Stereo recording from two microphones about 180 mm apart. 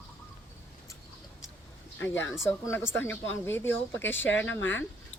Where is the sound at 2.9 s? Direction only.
10° left (ahead or behind).